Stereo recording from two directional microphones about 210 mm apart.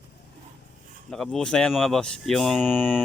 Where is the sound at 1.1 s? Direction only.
5° left (ahead or behind).